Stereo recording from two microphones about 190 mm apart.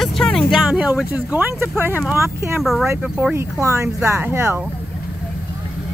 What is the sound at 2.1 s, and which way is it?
Speech, 15° right (ahead or behind).